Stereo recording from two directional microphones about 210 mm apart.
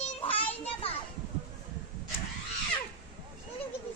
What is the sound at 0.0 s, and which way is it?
Children playing, 25° left (ahead or behind).